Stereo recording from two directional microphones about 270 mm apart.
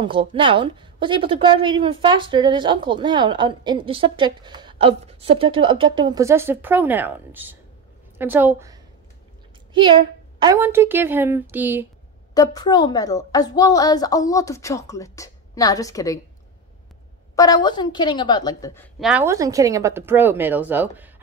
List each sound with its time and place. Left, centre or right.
0.0 s a woman's voice: centre
12.4 s a woman's voice: centre
17.4 s a woman's voice: centre
18.9 s a woman's voice: centre